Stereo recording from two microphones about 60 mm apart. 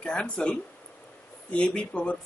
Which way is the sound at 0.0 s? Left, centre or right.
Centre.